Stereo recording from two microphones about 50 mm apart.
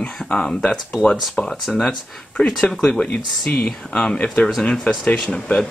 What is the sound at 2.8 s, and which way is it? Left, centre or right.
Speech, centre.